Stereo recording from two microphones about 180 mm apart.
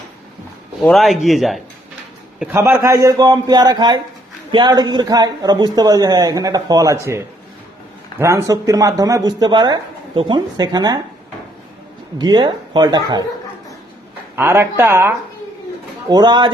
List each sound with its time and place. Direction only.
0.8 s speech: centre (ahead or behind)
2.4 s speech: 10° right (ahead or behind)
12.2 s speech: 25° right (ahead or behind)
14.3 s speech: 10° right (ahead or behind)